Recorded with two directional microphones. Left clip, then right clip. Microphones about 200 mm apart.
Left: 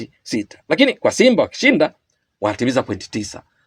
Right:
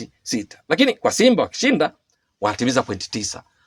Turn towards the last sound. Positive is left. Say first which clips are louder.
# left 1 dB
turn(degrees=-30)  # may be behind; listen again after turning